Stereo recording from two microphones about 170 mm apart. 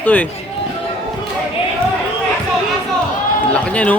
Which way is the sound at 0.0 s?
10° left (ahead or behind).